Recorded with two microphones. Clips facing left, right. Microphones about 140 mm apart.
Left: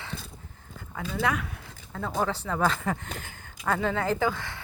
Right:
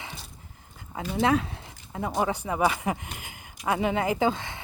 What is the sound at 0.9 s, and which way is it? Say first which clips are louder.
Speech: right 5 dB; 20° right (ahead or behind).